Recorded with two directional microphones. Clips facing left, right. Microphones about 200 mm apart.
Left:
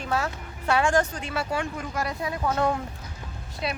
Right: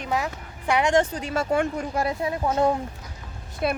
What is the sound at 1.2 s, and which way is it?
Speech, 40° right (ahead or behind).